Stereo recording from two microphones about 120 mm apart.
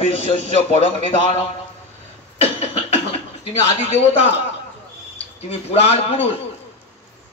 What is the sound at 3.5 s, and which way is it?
Speech, 60° left (ahead or behind).